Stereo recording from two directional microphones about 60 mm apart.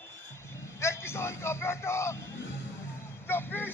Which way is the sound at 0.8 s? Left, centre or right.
Left.